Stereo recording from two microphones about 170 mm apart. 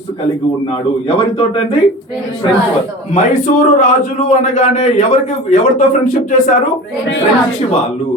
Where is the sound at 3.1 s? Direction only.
45° left (ahead or behind).